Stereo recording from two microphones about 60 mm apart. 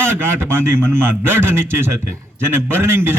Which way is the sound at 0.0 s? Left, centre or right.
Right.